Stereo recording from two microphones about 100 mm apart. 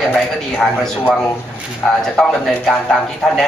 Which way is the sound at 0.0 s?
5° left (ahead or behind).